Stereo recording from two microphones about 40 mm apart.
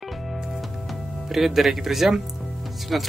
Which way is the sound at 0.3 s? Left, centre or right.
Centre.